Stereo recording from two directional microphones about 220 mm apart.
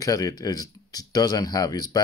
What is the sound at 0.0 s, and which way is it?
Speech, 15° left (ahead or behind).